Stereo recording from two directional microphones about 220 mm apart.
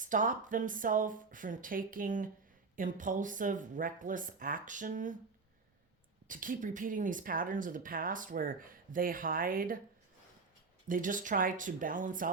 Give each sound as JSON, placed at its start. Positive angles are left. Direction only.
{"t": 0.0, "sound": "speech", "side_deg": -35}
{"t": 6.2, "sound": "speech", "side_deg": -35}
{"t": 10.8, "sound": "speech", "side_deg": -35}